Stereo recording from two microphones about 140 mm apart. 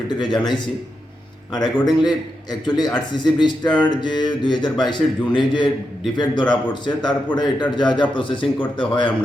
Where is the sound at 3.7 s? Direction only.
10° left (ahead or behind).